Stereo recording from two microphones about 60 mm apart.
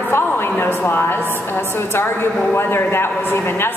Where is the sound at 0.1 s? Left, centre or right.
Left.